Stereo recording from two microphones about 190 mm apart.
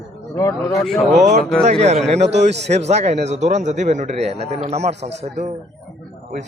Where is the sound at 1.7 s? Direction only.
35° right (ahead or behind).